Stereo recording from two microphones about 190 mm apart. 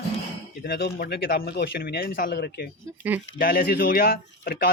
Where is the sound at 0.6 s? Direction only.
55° left (ahead or behind).